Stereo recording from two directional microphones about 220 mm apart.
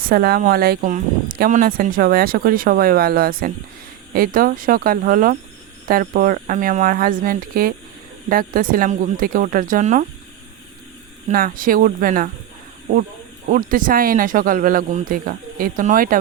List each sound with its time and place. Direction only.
0.0 s speech: 45° right (ahead or behind)
11.3 s speech: 40° right (ahead or behind)